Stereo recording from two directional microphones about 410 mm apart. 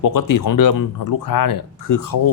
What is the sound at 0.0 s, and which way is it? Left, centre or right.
Speech, left.